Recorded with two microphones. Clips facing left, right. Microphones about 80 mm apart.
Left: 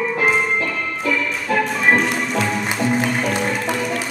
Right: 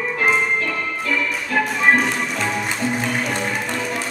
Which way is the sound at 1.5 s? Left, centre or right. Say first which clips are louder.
Even; centre.